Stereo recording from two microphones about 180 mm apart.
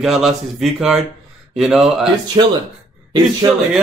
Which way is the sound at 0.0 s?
Centre (ahead or behind).